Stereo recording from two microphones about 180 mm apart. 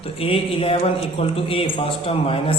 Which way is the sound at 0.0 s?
30° left (ahead or behind).